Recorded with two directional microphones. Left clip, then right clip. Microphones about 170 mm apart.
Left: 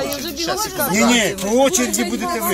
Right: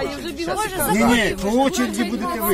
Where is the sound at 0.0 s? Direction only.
90° left.